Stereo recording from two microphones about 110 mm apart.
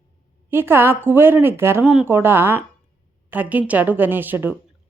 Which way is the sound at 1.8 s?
5° right (ahead or behind).